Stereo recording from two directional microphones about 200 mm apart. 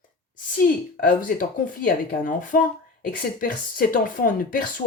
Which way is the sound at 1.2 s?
45° left (ahead or behind).